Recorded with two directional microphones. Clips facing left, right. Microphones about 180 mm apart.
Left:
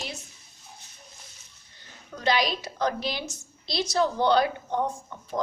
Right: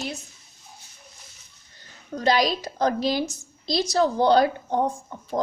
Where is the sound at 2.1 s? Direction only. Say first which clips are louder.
Right 4 dB; 40° right (ahead or behind).